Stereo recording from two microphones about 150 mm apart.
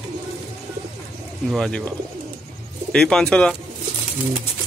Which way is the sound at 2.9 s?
5° left (ahead or behind).